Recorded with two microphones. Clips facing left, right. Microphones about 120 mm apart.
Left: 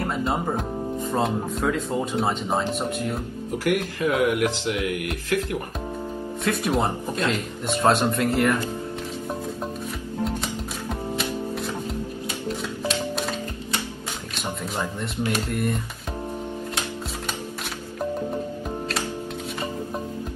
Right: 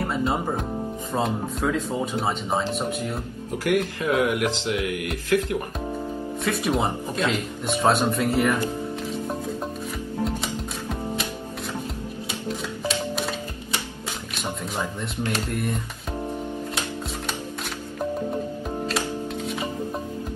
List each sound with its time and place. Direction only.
0.1 s speech: centre (ahead or behind)
3.7 s speech: 25° right (ahead or behind)
6.4 s speech: centre (ahead or behind)
14.4 s music: centre (ahead or behind)
15.4 s speech: centre (ahead or behind)